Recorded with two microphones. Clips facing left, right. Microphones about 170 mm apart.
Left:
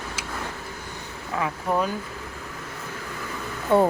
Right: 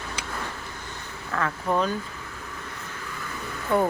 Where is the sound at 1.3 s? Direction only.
10° left (ahead or behind).